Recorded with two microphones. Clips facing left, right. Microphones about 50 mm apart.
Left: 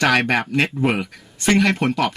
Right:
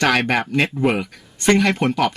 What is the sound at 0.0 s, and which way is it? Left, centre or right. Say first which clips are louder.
Speech: even; centre.